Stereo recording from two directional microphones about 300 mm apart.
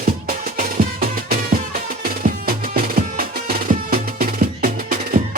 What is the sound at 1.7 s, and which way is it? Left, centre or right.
Music, right.